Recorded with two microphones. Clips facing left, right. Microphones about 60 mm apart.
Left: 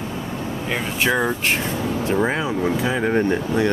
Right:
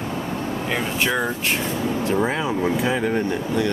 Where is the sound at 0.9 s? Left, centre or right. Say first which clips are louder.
Left 4 dB; left.